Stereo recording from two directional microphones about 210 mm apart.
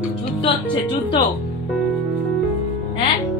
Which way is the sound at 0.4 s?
20° left (ahead or behind).